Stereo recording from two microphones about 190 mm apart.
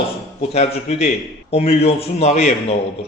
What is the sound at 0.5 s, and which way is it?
A man's voice, 35° left (ahead or behind).